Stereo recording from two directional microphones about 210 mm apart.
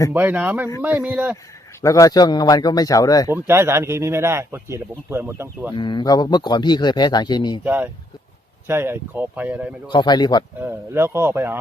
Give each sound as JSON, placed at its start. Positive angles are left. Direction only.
{"t": 0.1, "sound": "speech", "side_deg": -10}
{"t": 1.8, "sound": "speech", "side_deg": 15}
{"t": 3.3, "sound": "speech", "side_deg": -10}
{"t": 5.7, "sound": "speech", "side_deg": 20}
{"t": 7.6, "sound": "speech", "side_deg": -10}
{"t": 9.9, "sound": "speech", "side_deg": 20}
{"t": 10.6, "sound": "speech", "side_deg": -10}